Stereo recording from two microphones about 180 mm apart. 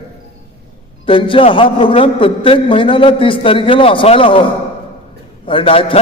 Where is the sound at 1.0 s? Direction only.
30° left (ahead or behind).